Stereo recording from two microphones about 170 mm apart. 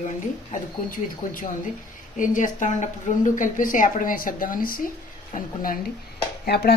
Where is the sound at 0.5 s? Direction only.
55° left (ahead or behind).